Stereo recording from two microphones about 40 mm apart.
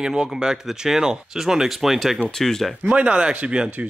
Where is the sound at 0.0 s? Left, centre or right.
Centre.